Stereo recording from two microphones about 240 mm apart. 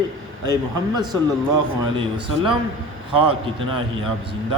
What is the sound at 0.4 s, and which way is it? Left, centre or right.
Speech, centre.